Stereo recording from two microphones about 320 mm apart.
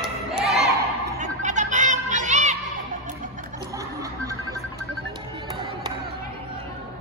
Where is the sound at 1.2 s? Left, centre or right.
Right.